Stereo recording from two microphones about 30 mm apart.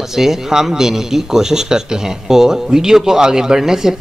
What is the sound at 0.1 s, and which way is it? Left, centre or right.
A man's voice, centre.